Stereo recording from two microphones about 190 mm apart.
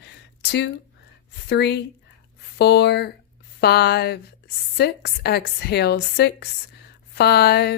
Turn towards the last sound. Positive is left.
turn(degrees=60)  # may be behind; listen again after turning